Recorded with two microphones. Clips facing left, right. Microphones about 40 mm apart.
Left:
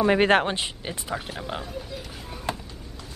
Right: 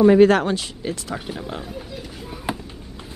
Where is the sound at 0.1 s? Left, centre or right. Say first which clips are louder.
Right 6 dB; left.